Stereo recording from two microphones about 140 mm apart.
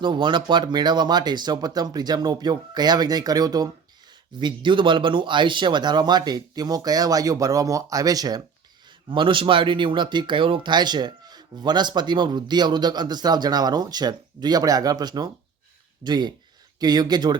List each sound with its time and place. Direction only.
0.0 s speech: 35° right (ahead or behind)
9.0 s speech: 35° right (ahead or behind)